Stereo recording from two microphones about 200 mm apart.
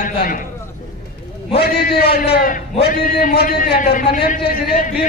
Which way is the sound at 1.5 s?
55° left (ahead or behind).